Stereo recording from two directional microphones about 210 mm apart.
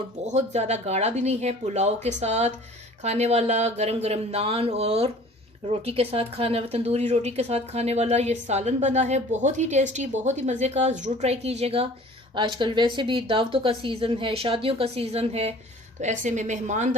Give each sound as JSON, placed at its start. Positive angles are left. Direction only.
{"t": 0.3, "sound": "a woman's voice", "side_deg": -30}